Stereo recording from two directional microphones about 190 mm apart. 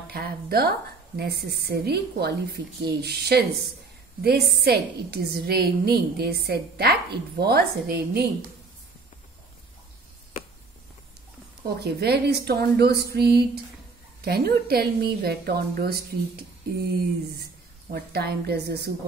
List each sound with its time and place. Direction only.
0.1 s a woman's voice: 55° right (ahead or behind)
11.6 s a woman's voice: 60° right (ahead or behind)
17.9 s a woman's voice: 55° right (ahead or behind)